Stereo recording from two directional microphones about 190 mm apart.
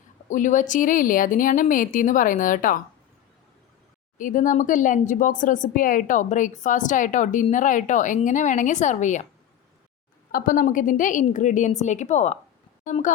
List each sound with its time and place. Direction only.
0.3 s a woman's voice: 40° left (ahead or behind)
4.2 s a woman's voice: 45° left (ahead or behind)
10.3 s a woman's voice: 45° left (ahead or behind)